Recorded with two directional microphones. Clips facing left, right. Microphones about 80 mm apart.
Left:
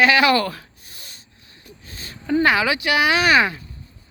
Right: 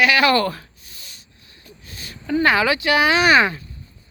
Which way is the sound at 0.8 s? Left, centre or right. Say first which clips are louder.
Left 1 dB; left.